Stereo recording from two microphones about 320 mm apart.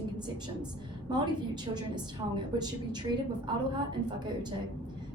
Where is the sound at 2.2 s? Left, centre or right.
Centre.